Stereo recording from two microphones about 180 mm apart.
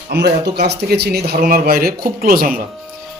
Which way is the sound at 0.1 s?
70° right (ahead or behind).